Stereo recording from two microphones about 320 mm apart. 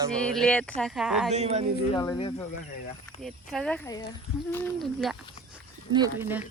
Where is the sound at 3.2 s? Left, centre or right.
Centre.